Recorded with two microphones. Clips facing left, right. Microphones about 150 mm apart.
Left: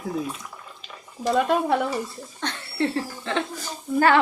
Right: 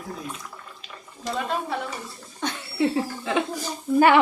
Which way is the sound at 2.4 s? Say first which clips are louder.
Right 2 dB; 10° right (ahead or behind).